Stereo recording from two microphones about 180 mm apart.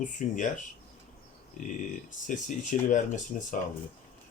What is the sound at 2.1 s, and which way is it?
Speech, 45° left (ahead or behind).